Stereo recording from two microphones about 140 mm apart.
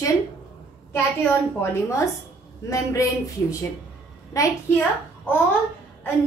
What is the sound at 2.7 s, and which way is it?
Child singing, 25° left (ahead or behind).